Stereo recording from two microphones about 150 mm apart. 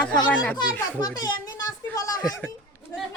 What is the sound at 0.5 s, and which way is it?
A child's voice, 25° left (ahead or behind).